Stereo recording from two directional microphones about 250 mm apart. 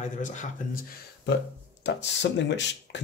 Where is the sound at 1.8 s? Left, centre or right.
Left.